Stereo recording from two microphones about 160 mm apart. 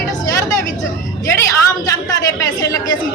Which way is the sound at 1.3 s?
20° left (ahead or behind).